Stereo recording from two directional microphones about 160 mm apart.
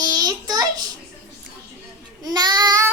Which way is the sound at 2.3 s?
25° right (ahead or behind).